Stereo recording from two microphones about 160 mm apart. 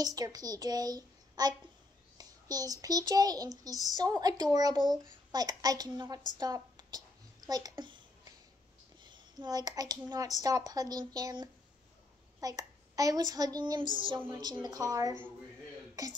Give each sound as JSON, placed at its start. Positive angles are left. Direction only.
{"t": 0.0, "sound": "a child's voice", "side_deg": -25}
{"t": 6.3, "sound": "a sound", "side_deg": -25}
{"t": 9.0, "sound": "a child's voice", "side_deg": -30}